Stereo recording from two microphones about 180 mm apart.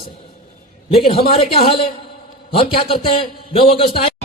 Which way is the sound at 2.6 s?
30° left (ahead or behind).